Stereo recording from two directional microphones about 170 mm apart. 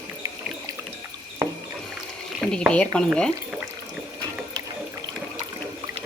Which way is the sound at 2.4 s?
Centre (ahead or behind).